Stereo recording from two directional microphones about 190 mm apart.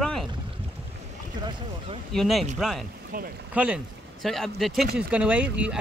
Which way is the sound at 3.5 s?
5° right (ahead or behind).